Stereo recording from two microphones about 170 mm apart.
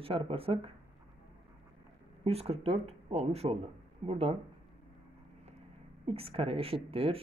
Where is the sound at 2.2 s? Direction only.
35° right (ahead or behind).